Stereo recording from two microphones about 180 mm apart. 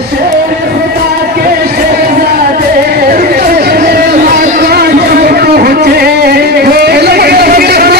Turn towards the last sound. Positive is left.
turn(degrees=-60)  # may be behind; listen again after turning